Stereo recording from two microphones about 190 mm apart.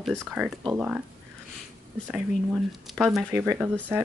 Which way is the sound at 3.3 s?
15° right (ahead or behind).